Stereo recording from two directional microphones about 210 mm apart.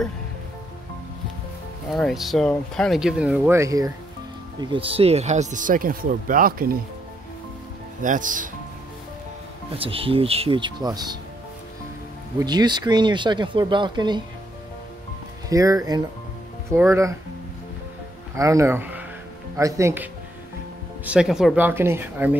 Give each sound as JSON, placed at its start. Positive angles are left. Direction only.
{"t": 1.9, "sound": "speech", "side_deg": 0}
{"t": 8.0, "sound": "speech", "side_deg": -40}
{"t": 9.8, "sound": "speech", "side_deg": -25}
{"t": 12.4, "sound": "speech", "side_deg": -20}
{"t": 15.5, "sound": "speech", "side_deg": -15}
{"t": 18.3, "sound": "speech", "side_deg": -15}